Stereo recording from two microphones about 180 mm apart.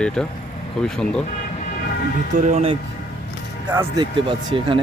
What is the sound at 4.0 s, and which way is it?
Speech, 30° right (ahead or behind).